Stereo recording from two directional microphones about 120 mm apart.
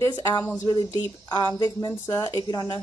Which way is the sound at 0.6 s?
35° left (ahead or behind).